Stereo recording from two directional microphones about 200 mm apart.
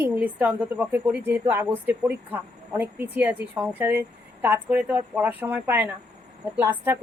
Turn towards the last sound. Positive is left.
turn(degrees=-10)  # may be behind; listen again after turning